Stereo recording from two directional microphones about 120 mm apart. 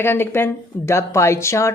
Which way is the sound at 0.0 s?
20° left (ahead or behind).